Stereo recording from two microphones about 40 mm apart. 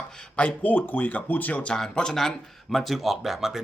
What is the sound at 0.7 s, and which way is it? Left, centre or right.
Speech, left.